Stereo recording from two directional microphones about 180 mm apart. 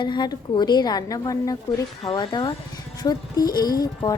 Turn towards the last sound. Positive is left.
turn(degrees=20)  # may be behind; listen again after turning